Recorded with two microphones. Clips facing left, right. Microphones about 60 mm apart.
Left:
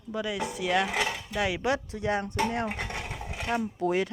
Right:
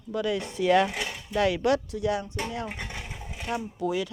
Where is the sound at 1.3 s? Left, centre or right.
Centre; by 2.2 s left.